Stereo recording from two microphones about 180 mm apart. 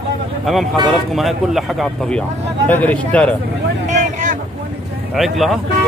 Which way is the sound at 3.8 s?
45° right (ahead or behind).